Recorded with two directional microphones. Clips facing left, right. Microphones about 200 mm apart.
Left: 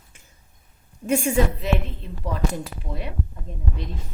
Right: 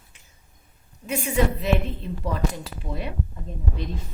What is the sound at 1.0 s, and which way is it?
Speech, 50° left (ahead or behind).